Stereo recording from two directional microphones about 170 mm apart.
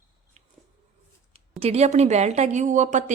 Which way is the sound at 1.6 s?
40° right (ahead or behind).